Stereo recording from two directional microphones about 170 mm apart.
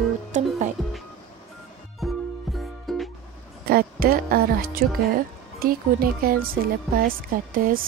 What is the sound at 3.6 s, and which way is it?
Speech, 60° right (ahead or behind).